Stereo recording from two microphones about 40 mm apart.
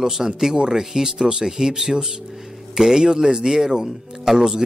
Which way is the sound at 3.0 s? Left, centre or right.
Centre.